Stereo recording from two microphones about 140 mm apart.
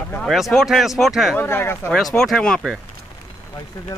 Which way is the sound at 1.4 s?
15° left (ahead or behind).